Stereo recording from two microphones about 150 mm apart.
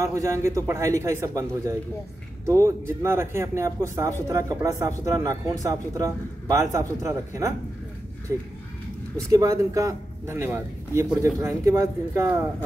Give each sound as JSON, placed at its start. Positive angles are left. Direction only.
{"t": 0.0, "sound": "speech", "side_deg": -20}
{"t": 9.1, "sound": "speech", "side_deg": -20}